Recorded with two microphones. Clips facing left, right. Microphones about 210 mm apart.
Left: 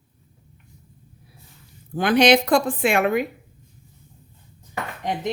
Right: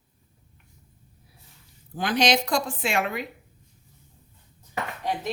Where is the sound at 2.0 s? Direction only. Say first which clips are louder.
Left 7 dB; 60° left (ahead or behind).